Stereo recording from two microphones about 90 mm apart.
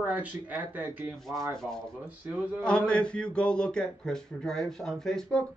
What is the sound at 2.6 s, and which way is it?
A man's voice, 10° left (ahead or behind).